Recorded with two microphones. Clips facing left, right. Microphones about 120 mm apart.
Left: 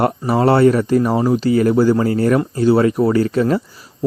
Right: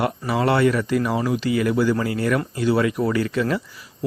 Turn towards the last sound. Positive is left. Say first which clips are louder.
# left 7 dB
turn(degrees=35)  # may be behind; listen again after turning